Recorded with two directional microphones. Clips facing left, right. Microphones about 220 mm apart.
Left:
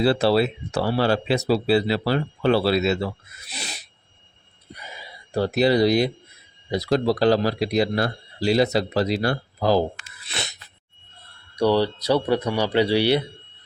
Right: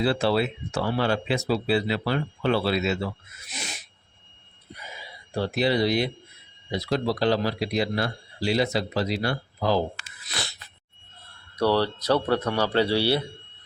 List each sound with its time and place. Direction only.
0.0 s speech: 35° left (ahead or behind)
3.5 s sneeze: 35° left (ahead or behind)
5.3 s speech: 40° left (ahead or behind)
10.2 s a sound: 25° left (ahead or behind)
11.5 s speech: 15° left (ahead or behind)